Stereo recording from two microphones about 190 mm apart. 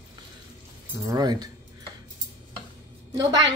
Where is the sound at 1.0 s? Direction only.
20° right (ahead or behind).